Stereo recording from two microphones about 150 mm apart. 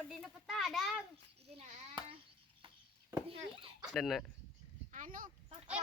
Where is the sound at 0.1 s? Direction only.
Centre (ahead or behind).